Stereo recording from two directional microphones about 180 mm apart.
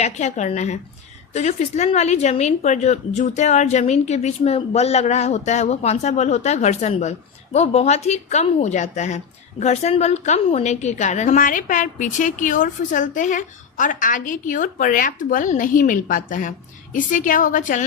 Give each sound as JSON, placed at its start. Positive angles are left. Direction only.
{"t": 0.0, "sound": "speech", "side_deg": 40}